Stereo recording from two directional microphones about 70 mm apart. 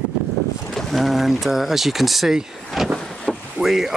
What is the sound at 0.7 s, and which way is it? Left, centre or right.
Speech, centre.